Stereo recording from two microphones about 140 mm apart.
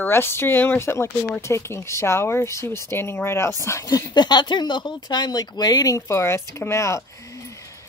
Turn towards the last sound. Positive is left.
turn(degrees=20)  # may be behind; listen again after turning